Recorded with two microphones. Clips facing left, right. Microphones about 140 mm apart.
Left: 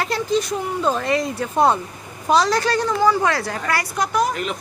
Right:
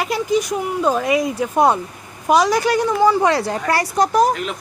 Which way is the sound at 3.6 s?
35° right (ahead or behind).